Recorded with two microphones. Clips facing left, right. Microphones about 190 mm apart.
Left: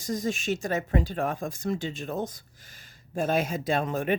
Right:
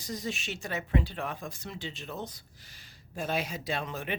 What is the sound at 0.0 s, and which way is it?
Speech, 45° left (ahead or behind).